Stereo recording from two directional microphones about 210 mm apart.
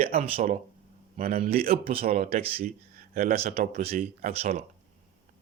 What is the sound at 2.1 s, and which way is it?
Speech, 30° right (ahead or behind).